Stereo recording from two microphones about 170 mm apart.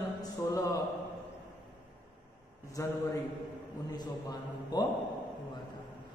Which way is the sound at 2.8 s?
20° left (ahead or behind).